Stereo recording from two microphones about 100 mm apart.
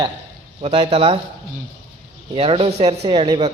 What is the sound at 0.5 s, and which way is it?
Speech, 60° right (ahead or behind).